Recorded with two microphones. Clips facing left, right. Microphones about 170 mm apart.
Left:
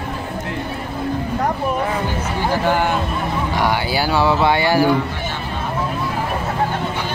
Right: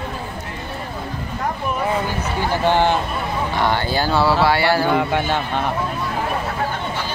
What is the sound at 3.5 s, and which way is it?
Speech, 10° left (ahead or behind).